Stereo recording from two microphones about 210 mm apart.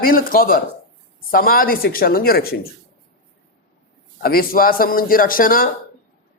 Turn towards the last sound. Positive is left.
turn(degrees=40)  # may be behind; listen again after turning